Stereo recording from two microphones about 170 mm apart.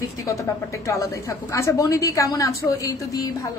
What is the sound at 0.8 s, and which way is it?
A woman's voice, 20° left (ahead or behind).